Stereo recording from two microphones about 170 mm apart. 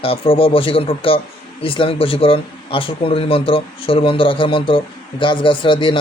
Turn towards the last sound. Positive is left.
turn(degrees=30)  # may be behind; listen again after turning